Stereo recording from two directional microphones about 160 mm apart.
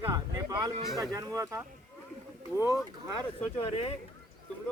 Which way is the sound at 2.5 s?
20° left (ahead or behind).